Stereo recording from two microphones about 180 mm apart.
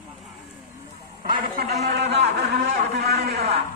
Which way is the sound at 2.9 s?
60° right (ahead or behind).